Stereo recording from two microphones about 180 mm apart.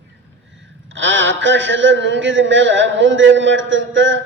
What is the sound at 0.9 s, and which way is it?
A man's voice, 90° right.